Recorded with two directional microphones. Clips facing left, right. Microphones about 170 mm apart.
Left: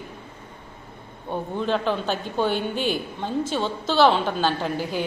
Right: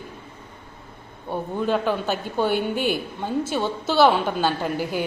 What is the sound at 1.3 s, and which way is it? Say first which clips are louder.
A woman's voice: right 1 dB; 5° right (ahead or behind).